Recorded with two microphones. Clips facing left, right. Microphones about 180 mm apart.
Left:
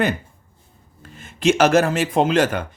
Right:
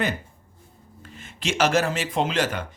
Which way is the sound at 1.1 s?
45° left (ahead or behind).